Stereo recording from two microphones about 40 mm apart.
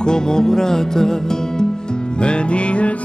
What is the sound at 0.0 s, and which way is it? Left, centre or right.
Music, centre.